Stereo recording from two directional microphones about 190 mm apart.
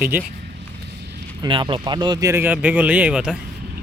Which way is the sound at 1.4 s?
25° right (ahead or behind).